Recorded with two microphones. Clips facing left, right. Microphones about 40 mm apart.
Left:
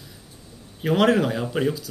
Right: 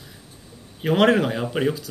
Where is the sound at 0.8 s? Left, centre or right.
Centre.